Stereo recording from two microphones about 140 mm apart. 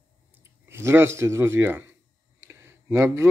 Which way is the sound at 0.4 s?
20° right (ahead or behind).